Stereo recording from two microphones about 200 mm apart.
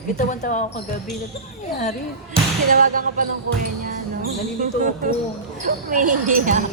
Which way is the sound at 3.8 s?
45° right (ahead or behind).